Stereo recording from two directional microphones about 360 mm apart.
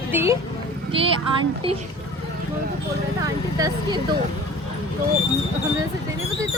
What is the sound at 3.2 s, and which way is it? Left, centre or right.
Speech, centre.